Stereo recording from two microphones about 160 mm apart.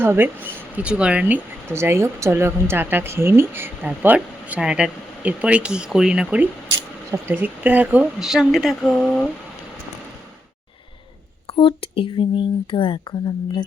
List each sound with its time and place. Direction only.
0.0 s speech: 15° right (ahead or behind)
11.4 s speech: 35° left (ahead or behind)